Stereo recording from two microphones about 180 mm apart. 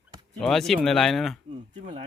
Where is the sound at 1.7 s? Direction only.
40° right (ahead or behind).